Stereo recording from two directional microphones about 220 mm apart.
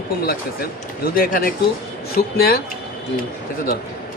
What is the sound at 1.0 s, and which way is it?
Speech, 40° left (ahead or behind).